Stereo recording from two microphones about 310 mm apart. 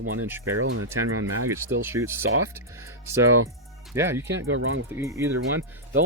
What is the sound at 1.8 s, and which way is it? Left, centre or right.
Speech, centre.